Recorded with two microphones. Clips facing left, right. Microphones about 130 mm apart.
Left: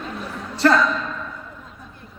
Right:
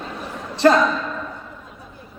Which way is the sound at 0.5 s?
20° right (ahead or behind).